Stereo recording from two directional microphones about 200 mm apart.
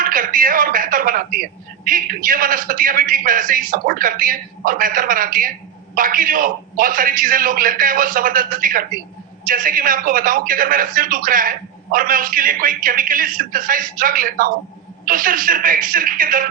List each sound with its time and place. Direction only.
0.0 s a man's voice: 45° right (ahead or behind)